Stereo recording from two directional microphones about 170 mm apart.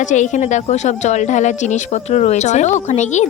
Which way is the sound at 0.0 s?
45° left (ahead or behind).